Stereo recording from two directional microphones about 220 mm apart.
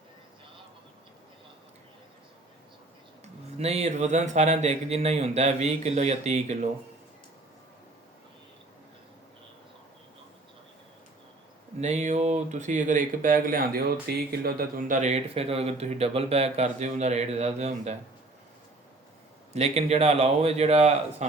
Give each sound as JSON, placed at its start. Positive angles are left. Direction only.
{"t": 3.6, "sound": "speech", "side_deg": -30}
{"t": 11.8, "sound": "speech", "side_deg": -30}
{"t": 19.5, "sound": "a man's voice", "side_deg": -30}